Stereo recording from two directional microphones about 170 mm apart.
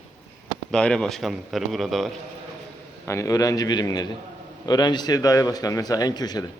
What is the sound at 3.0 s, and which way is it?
A man's voice, 20° left (ahead or behind).